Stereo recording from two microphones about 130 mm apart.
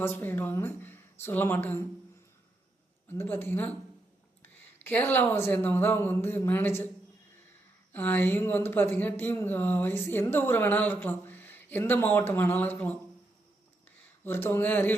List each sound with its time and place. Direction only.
0.0 s speech: 15° left (ahead or behind)
3.1 s speech: 15° left (ahead or behind)
7.9 s speech: 15° left (ahead or behind)
14.3 s speech: 20° left (ahead or behind)